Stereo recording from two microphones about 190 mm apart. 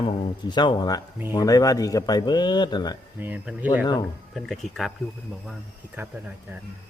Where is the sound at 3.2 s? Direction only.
10° right (ahead or behind).